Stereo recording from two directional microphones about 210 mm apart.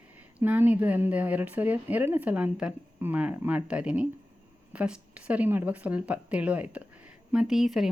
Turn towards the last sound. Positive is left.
turn(degrees=0)  # may be behind; listen again after turning